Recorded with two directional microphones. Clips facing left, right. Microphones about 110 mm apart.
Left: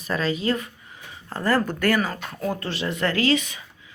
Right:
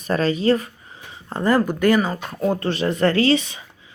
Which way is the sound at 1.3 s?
20° right (ahead or behind).